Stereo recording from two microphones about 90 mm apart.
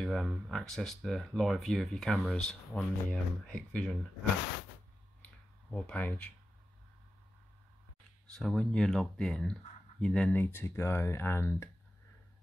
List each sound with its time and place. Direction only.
0.0 s speech: 5° left (ahead or behind)
5.2 s clicking: 15° left (ahead or behind)
8.3 s speech: 5° left (ahead or behind)
10.4 s speech: 25° left (ahead or behind)